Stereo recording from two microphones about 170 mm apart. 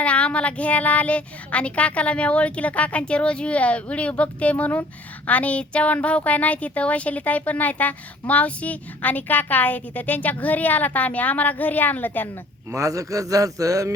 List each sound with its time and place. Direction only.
0.0 s speech: 5° left (ahead or behind)
12.7 s speech: 20° right (ahead or behind)